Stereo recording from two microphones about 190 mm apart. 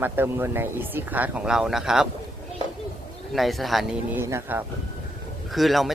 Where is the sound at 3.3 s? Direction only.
Centre (ahead or behind).